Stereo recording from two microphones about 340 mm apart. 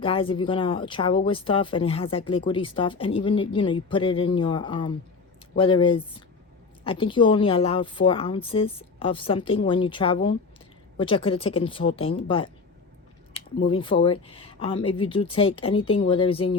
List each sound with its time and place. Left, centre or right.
0.0 s speech: centre
13.3 s speech: centre